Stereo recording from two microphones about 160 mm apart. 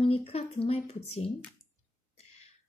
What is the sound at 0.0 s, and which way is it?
Speech, 35° left (ahead or behind).